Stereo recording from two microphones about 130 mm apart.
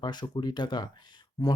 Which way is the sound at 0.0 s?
35° left (ahead or behind).